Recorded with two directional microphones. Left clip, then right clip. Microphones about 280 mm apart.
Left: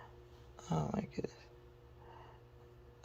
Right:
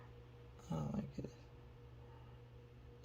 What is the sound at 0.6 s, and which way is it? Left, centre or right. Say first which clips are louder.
Speech: left 7 dB; left.